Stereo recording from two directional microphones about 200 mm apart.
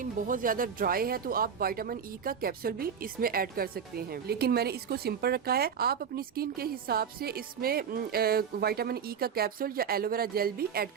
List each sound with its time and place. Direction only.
0.0 s speech: 45° right (ahead or behind)